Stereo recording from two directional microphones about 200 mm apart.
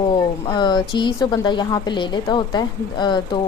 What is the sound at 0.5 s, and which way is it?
A woman's voice, 20° left (ahead or behind).